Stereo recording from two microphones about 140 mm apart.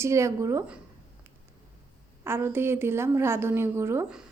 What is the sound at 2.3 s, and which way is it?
A woman's voice, 15° right (ahead or behind).